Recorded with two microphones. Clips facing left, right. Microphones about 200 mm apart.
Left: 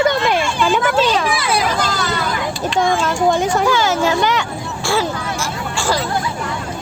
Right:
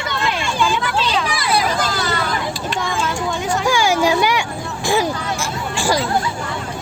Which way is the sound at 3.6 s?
10° right (ahead or behind).